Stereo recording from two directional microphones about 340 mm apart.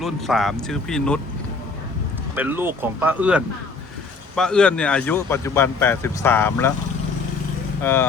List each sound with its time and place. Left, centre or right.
0.0 s speech: centre
2.3 s speech: centre
7.8 s speech: centre